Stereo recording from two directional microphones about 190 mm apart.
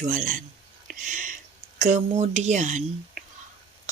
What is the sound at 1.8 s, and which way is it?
Speech, 35° right (ahead or behind).